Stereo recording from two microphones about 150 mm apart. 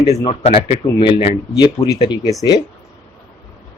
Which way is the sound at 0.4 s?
45° left (ahead or behind).